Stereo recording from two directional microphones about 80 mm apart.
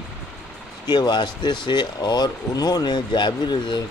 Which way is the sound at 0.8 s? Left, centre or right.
Left.